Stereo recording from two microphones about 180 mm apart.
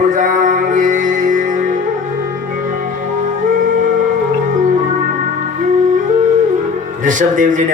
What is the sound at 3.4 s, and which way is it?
Flute, 45° right (ahead or behind).